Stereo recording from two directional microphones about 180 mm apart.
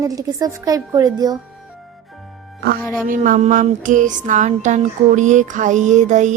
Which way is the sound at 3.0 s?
45° right (ahead or behind).